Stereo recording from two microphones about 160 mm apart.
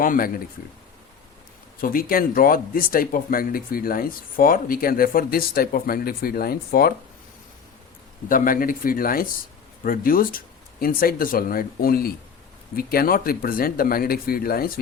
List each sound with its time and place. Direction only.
0.0 s speech: 60° left (ahead or behind)
1.8 s speech: 60° left (ahead or behind)
8.3 s speech: 60° left (ahead or behind)